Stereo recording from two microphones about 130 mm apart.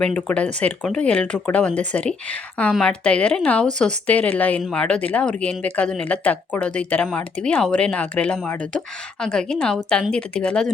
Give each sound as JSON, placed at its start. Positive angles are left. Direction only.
{"t": 0.0, "sound": "a woman's voice", "side_deg": 10}